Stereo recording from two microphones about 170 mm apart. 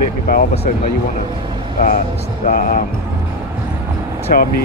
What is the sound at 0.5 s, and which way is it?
Speech, 40° left (ahead or behind).